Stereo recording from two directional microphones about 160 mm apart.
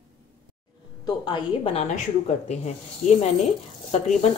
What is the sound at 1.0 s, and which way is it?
Speech, 30° left (ahead or behind).